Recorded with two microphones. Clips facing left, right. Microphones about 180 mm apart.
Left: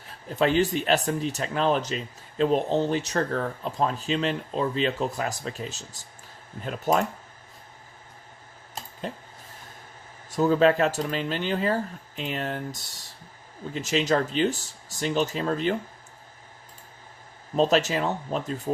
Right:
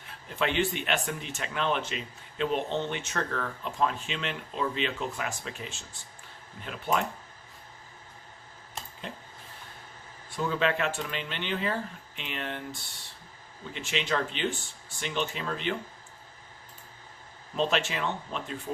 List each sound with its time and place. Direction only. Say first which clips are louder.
0.3 s speech: left 6 dB; 40° left (ahead or behind)
8.7 s a sound: left 6 dB; 40° left (ahead or behind)
10.2 s speech: left 8 dB; 40° left (ahead or behind)
17.5 s speech: left 7 dB; 40° left (ahead or behind)